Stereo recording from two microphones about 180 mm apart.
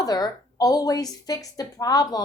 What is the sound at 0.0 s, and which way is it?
A woman's voice, 20° left (ahead or behind).